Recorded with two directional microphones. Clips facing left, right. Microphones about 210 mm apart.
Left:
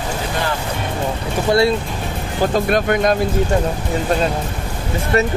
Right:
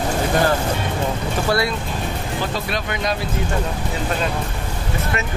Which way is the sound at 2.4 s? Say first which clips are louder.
Left 12 dB; 50° left (ahead or behind).